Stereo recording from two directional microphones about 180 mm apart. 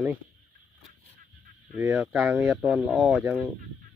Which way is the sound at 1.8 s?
10° right (ahead or behind).